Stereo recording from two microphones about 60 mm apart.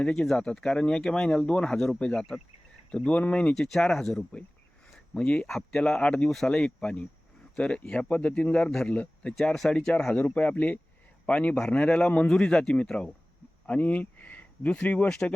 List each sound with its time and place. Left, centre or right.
0.0 s speech: centre
3.5 s speech: centre
4.9 s a sound: centre
5.5 s speech: centre
6.0 s speech: centre
8.9 s speech: left
9.4 s speech: centre
10.2 s speech: left
13.7 s speech: left